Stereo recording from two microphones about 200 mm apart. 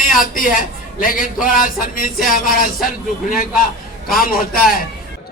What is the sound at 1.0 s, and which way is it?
A man's voice, 45° left (ahead or behind).